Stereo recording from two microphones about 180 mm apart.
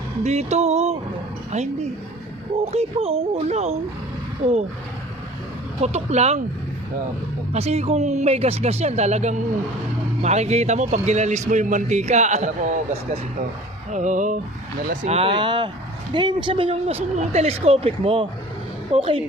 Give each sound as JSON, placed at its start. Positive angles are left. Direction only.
{"t": 0.2, "sound": "a man's voice", "side_deg": -35}
{"t": 5.8, "sound": "a man's voice", "side_deg": -40}
{"t": 7.5, "sound": "a man's voice", "side_deg": -35}
{"t": 13.9, "sound": "a sound", "side_deg": -45}
{"t": 15.0, "sound": "a man's voice", "side_deg": -35}